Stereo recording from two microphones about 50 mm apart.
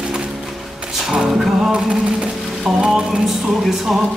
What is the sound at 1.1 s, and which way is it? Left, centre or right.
Music, centre.